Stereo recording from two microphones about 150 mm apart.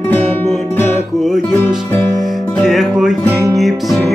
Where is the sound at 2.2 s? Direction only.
Centre (ahead or behind).